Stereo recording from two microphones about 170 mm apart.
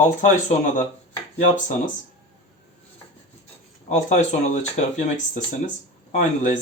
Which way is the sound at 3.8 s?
45° left (ahead or behind).